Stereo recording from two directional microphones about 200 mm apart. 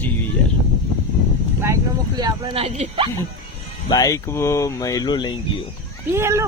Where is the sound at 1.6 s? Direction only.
15° right (ahead or behind).